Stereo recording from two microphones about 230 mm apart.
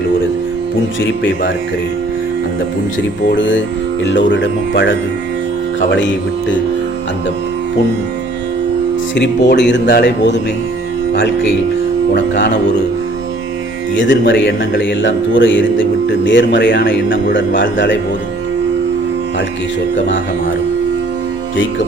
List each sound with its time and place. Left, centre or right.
3.3 s speech: left
9.1 s speech: left
12.1 s speech: left
13.9 s speech: left